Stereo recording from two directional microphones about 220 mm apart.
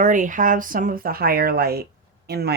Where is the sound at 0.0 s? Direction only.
35° right (ahead or behind).